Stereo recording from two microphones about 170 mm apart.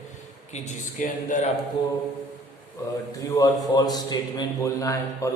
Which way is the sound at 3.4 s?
25° left (ahead or behind).